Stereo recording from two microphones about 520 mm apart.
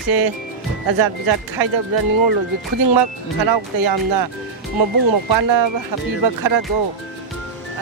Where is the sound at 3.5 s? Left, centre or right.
Right.